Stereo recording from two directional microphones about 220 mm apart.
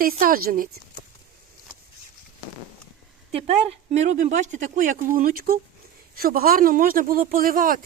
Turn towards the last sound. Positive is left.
turn(degrees=-40)  # may be behind; listen again after turning